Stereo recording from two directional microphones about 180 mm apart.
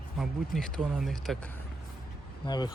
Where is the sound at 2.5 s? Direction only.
25° left (ahead or behind).